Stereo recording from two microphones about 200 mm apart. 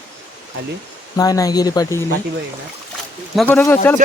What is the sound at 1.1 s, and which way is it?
Speech, 20° left (ahead or behind).